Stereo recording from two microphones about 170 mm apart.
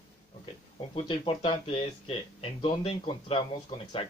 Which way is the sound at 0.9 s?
35° left (ahead or behind).